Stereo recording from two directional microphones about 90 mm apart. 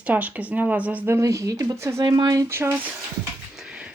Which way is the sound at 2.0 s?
50° right (ahead or behind).